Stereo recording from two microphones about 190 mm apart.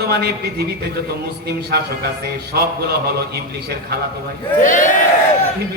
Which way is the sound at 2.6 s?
55° right (ahead or behind).